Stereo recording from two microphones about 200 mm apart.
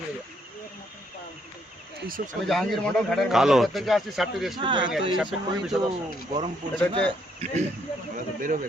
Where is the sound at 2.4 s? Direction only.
Centre (ahead or behind).